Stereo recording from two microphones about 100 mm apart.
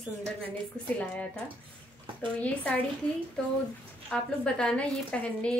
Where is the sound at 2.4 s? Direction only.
15° left (ahead or behind).